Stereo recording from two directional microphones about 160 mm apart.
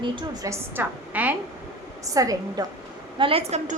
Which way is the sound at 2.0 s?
20° right (ahead or behind).